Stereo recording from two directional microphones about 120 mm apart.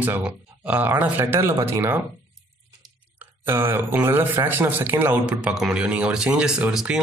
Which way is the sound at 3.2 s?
20° right (ahead or behind).